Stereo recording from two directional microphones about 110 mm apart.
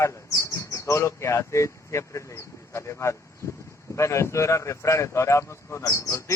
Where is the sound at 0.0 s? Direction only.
25° left (ahead or behind).